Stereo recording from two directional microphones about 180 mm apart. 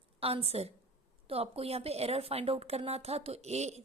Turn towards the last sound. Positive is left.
turn(degrees=-35)  # may be behind; listen again after turning